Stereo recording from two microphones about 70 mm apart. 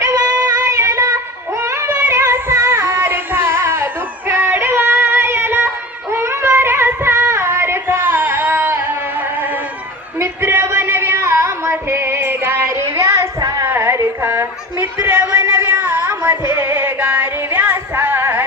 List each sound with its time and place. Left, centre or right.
0.4 s music: right
1.6 s child singing: right
1.9 s music: right
4.3 s female singing: right
4.6 s music: right
10.2 s a sound: right
16.5 s female singing: right